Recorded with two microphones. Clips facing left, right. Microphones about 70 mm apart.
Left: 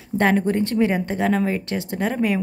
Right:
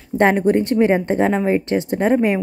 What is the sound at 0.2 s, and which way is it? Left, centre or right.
Speech, right.